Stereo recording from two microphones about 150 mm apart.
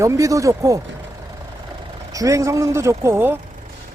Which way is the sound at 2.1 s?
20° right (ahead or behind).